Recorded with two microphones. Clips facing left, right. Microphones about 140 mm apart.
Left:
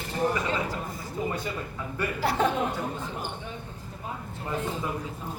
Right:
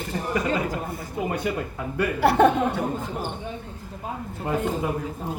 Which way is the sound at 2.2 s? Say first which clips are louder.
Right 8 dB; 60° right (ahead or behind).